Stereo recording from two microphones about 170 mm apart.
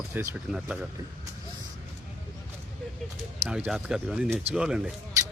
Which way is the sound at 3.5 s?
5° right (ahead or behind).